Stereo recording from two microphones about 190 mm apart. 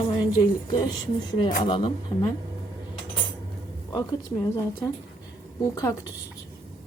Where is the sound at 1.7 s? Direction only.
25° left (ahead or behind).